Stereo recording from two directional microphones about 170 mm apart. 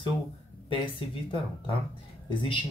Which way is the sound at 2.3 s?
30° left (ahead or behind).